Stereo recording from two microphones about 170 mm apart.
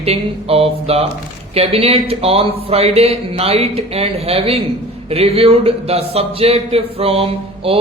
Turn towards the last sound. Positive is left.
turn(degrees=-35)  # may be behind; listen again after turning